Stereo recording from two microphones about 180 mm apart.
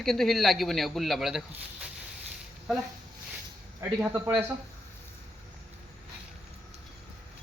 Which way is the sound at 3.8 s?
10° right (ahead or behind).